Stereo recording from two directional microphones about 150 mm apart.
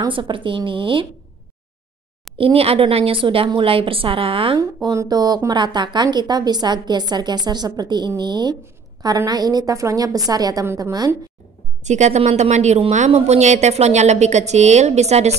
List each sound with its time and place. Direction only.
0.0 s a woman's voice: 35° right (ahead or behind)
2.3 s a woman's voice: 40° right (ahead or behind)
4.8 s a woman's voice: 25° right (ahead or behind)
11.8 s a woman's voice: 50° right (ahead or behind)